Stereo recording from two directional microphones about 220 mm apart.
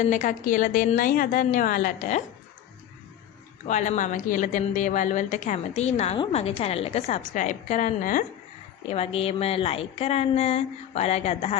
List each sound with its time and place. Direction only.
0.0 s a woman's voice: 35° left (ahead or behind)
3.7 s a woman's voice: 35° left (ahead or behind)